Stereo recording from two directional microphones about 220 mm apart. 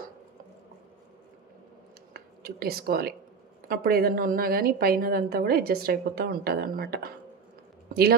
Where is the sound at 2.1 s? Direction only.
45° right (ahead or behind).